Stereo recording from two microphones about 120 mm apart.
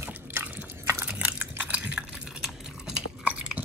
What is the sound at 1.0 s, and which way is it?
Chewing, 15° right (ahead or behind).